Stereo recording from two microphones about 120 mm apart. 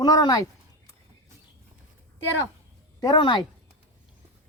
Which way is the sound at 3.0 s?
35° left (ahead or behind).